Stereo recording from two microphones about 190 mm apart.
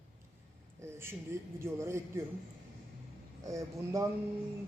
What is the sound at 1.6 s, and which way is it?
Speech, 15° right (ahead or behind).